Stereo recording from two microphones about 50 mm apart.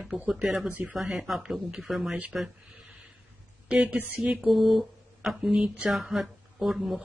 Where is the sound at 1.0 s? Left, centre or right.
Centre.